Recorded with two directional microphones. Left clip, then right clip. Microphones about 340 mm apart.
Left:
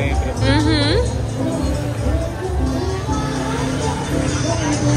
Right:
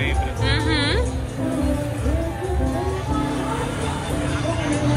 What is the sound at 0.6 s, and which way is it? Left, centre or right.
Speech, centre.